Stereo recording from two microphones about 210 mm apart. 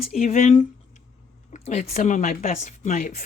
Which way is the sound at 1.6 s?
35° left (ahead or behind).